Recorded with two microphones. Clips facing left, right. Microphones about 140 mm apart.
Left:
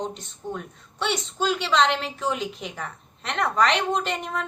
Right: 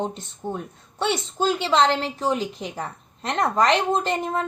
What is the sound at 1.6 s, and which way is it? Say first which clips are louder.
A woman's voice: right 2 dB; 35° right (ahead or behind).